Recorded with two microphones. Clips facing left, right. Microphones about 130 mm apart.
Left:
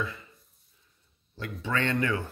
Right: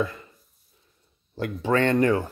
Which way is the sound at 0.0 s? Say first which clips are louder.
Right 7 dB; 45° right (ahead or behind).